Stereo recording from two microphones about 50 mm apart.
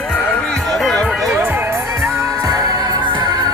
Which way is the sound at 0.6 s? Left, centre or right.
Centre.